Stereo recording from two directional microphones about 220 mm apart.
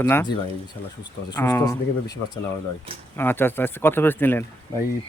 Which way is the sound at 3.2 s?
10° left (ahead or behind).